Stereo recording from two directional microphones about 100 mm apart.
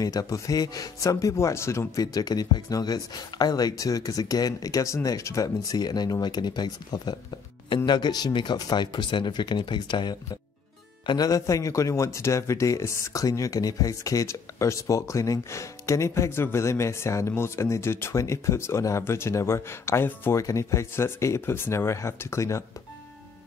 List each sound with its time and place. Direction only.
0.0 s speech: 35° left (ahead or behind)